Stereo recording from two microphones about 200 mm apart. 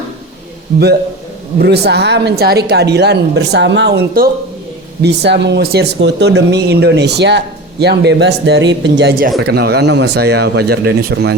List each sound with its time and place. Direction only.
1.6 s speech: 55° right (ahead or behind)